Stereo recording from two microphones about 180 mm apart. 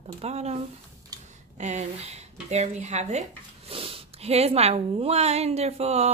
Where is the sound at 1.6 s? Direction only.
40° right (ahead or behind).